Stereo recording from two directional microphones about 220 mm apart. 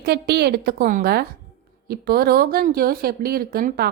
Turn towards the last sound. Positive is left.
turn(degrees=-45)  # may be behind; listen again after turning